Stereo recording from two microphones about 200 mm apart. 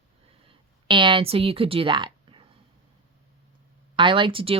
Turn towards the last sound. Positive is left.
turn(degrees=-25)  # may be behind; listen again after turning